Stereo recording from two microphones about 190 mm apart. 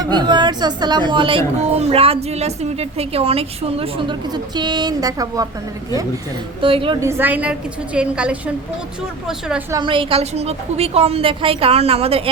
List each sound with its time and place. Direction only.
0.1 s a woman's voice: 25° right (ahead or behind)
6.6 s a woman's voice: 30° right (ahead or behind)
7.0 s a woman's voice: 10° right (ahead or behind)
9.7 s a woman's voice: 25° right (ahead or behind)